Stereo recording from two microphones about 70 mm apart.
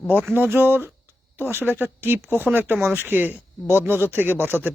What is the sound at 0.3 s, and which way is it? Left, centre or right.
Speech, right.